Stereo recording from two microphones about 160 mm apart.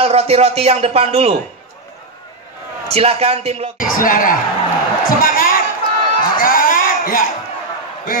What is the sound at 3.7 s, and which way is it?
A man's voice, 60° left (ahead or behind).